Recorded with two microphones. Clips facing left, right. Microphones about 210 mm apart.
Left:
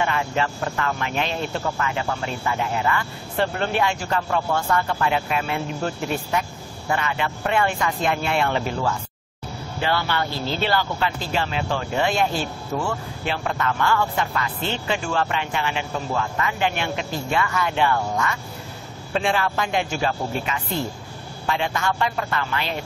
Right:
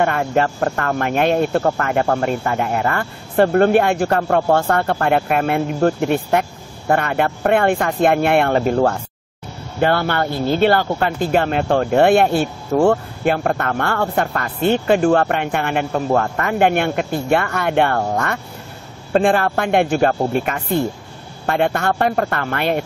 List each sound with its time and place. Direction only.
0.0 s speech: 55° right (ahead or behind)